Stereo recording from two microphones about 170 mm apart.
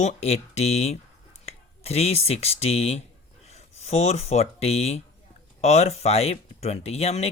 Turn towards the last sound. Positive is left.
turn(degrees=35)  # may be behind; listen again after turning